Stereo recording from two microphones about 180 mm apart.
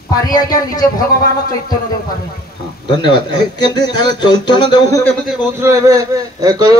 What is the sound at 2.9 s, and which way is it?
Speech, 25° left (ahead or behind).